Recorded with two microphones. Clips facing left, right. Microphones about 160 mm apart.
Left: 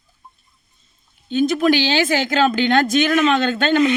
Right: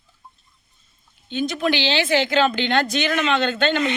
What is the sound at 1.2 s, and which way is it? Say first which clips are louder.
Speech: left 6 dB; 45° left (ahead or behind).